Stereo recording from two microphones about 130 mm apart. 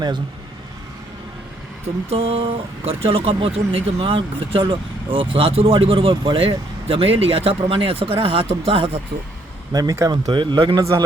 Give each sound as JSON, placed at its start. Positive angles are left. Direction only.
{"t": 2.0, "sound": "speech", "side_deg": -50}
{"t": 9.7, "sound": "speech", "side_deg": -25}
{"t": 10.8, "sound": "a man's voice", "side_deg": -25}